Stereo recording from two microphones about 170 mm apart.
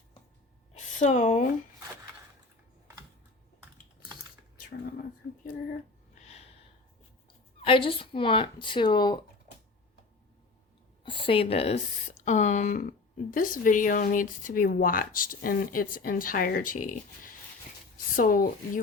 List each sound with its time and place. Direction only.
0.7 s a sound: 45° left (ahead or behind)
6.1 s snort: 40° left (ahead or behind)
7.6 s speech: 30° left (ahead or behind)
11.0 s speech: 30° left (ahead or behind); by 18.8 s 55° left (ahead or behind)